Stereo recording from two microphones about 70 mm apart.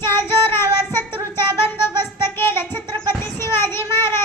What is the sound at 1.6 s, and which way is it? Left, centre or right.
Child singing, left.